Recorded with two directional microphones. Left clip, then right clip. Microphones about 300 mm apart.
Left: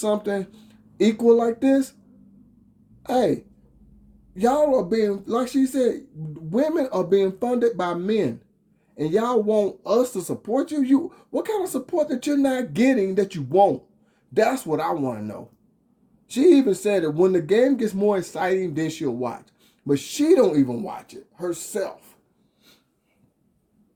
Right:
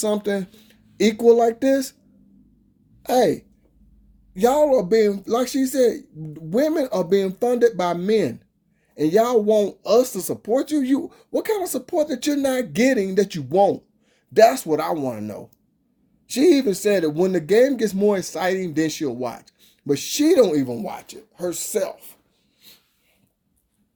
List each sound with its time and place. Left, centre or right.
0.0 s speech: right
3.0 s speech: right